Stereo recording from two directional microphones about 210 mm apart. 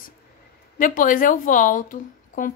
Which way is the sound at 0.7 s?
40° left (ahead or behind).